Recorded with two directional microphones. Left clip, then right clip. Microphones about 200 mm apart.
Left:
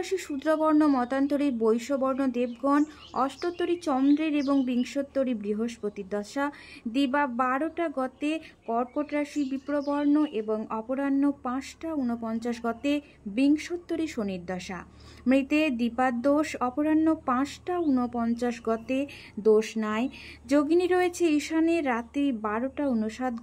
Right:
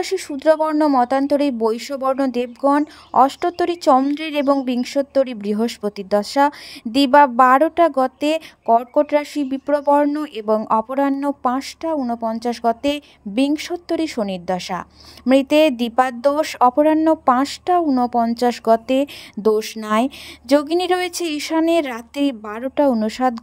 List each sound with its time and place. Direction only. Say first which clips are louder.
0.0 s speech: right 11 dB; 35° right (ahead or behind)
4.6 s speech: right 8 dB; 35° right (ahead or behind)